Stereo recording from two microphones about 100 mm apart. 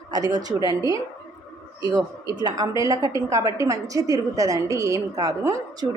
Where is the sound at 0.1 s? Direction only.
40° right (ahead or behind).